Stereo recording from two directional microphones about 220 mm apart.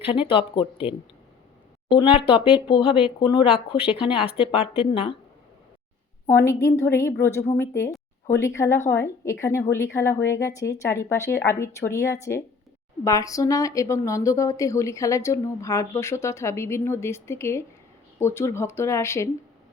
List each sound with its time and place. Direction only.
0.0 s speech: 25° left (ahead or behind)
6.2 s speech: 10° left (ahead or behind)